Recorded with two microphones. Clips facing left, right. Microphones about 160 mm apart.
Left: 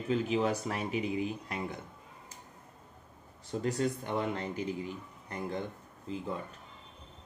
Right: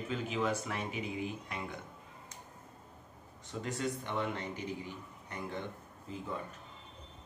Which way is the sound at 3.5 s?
40° left (ahead or behind).